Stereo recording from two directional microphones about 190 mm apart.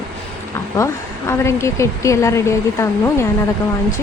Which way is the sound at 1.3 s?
15° left (ahead or behind).